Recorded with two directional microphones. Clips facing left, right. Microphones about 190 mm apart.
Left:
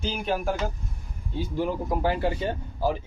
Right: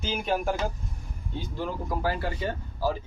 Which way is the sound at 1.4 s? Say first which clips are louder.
Left 5 dB; 15° left (ahead or behind).